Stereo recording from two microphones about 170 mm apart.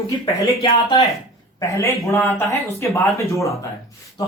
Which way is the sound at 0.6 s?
30° left (ahead or behind).